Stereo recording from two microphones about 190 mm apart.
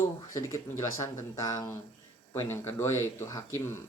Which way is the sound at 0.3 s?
15° left (ahead or behind).